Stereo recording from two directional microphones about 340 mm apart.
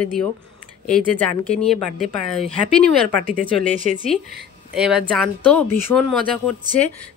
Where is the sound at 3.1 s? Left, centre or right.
Right.